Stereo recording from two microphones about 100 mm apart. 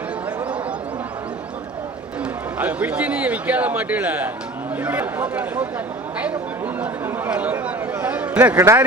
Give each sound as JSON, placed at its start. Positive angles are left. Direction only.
{"t": 2.6, "sound": "a man's voice", "side_deg": -15}
{"t": 7.0, "sound": "a man's voice", "side_deg": -15}
{"t": 8.5, "sound": "speech", "side_deg": -30}